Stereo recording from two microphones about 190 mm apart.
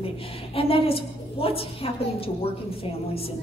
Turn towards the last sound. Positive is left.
turn(degrees=30)  # may be behind; listen again after turning